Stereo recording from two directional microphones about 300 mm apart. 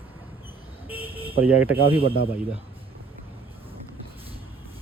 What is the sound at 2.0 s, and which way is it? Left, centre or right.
Speech, left.